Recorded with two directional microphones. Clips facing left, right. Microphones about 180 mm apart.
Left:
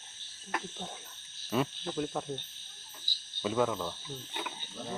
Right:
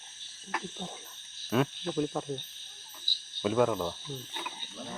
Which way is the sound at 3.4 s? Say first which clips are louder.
Right 3 dB; 5° right (ahead or behind).